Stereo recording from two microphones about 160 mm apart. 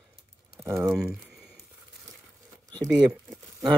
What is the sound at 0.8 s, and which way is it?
Speech, centre (ahead or behind).